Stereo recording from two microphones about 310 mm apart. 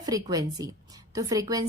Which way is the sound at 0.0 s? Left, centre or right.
Centre.